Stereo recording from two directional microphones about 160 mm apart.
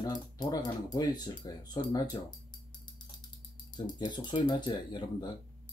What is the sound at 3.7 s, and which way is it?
Speech, 25° left (ahead or behind).